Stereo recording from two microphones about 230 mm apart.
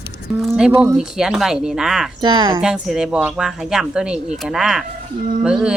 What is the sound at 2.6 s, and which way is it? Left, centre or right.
Speech, centre.